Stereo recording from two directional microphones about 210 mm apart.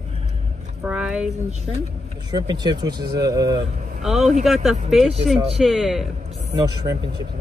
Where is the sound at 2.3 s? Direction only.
20° right (ahead or behind).